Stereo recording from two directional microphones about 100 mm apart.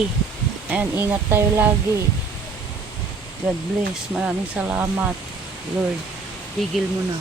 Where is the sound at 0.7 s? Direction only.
20° right (ahead or behind).